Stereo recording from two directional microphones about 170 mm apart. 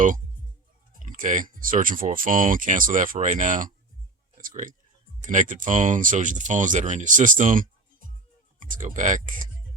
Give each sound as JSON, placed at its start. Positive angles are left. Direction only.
{"t": 1.0, "sound": "speech", "side_deg": -50}
{"t": 4.4, "sound": "a sound", "side_deg": -55}
{"t": 5.2, "sound": "speech", "side_deg": -50}